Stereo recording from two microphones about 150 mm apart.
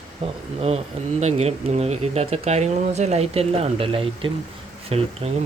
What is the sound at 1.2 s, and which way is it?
Speech, 45° right (ahead or behind).